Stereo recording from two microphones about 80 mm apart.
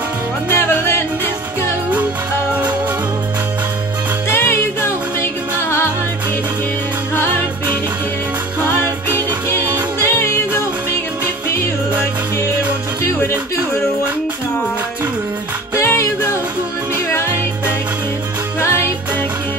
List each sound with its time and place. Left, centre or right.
0.6 s music: left
4.3 s music: left
10.0 s music: left
15.8 s music: left